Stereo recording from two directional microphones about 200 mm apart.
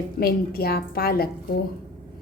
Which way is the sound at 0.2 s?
50° left (ahead or behind).